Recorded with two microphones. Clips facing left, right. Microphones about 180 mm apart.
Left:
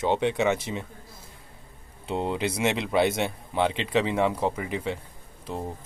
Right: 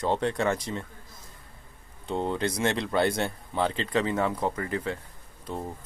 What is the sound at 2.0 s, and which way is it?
Speech, 5° left (ahead or behind).